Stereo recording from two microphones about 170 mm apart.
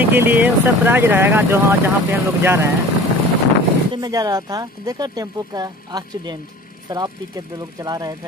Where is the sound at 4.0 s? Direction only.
20° right (ahead or behind).